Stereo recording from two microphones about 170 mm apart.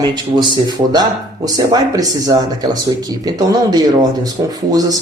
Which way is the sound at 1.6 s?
20° right (ahead or behind).